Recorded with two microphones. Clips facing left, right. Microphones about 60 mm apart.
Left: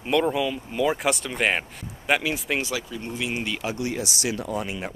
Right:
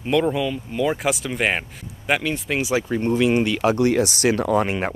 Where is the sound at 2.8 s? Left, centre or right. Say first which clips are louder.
Right 11 dB; right.